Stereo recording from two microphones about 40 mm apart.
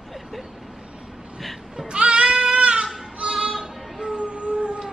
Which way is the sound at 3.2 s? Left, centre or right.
Right.